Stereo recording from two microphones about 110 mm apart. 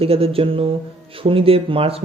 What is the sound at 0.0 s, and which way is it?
Speech, 60° right (ahead or behind).